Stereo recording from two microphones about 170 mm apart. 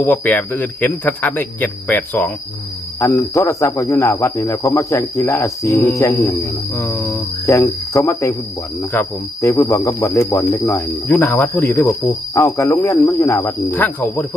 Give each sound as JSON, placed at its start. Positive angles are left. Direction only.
{"t": 0.0, "sound": "speech", "side_deg": 10}